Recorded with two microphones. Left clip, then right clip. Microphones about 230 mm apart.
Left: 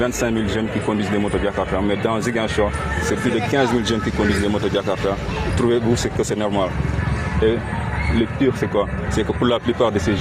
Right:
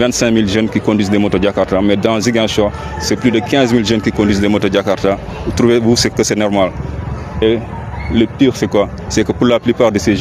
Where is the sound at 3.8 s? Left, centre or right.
Right.